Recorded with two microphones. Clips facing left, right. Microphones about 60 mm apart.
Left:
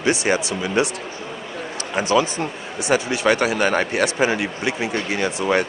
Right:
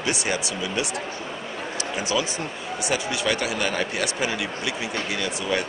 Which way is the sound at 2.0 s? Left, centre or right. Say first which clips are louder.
Left 8 dB; left.